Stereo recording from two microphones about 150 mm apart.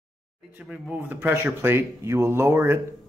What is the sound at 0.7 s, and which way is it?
Speech, 5° right (ahead or behind).